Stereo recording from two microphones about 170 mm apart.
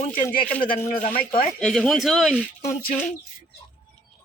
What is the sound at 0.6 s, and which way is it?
Speech, 55° left (ahead or behind).